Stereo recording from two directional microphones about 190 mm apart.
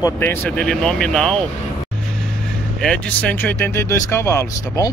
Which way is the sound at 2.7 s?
5° left (ahead or behind).